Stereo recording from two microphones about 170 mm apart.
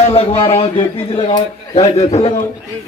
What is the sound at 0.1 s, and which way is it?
A man's voice, 35° left (ahead or behind).